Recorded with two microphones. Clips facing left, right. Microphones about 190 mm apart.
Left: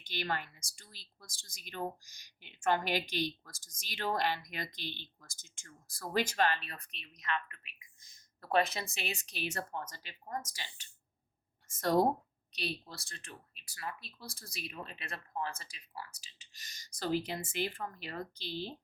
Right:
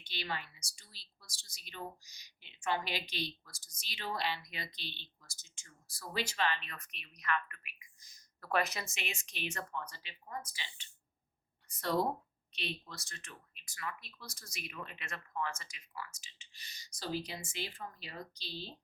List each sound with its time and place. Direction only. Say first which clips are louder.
0.0 s speech: left 4 dB; 50° left (ahead or behind)